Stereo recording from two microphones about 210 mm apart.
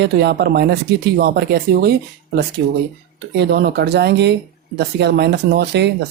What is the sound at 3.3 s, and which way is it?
Speech, 50° right (ahead or behind).